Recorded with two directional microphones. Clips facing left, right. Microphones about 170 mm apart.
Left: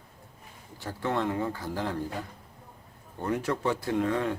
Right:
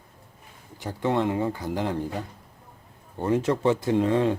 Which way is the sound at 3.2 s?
25° right (ahead or behind).